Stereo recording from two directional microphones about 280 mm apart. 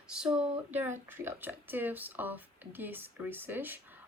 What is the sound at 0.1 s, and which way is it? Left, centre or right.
A woman's voice, centre.